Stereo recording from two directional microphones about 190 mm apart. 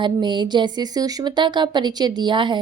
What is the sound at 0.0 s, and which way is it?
Speech, 25° right (ahead or behind).